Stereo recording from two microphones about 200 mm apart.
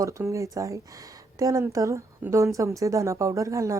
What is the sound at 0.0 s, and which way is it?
Speech, 15° right (ahead or behind).